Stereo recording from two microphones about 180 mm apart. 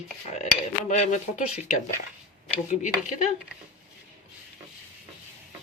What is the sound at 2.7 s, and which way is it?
Speech, 40° left (ahead or behind).